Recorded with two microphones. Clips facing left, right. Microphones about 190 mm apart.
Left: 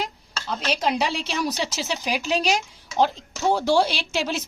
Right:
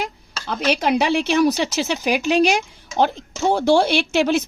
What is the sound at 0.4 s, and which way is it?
A woman's voice, 65° right (ahead or behind).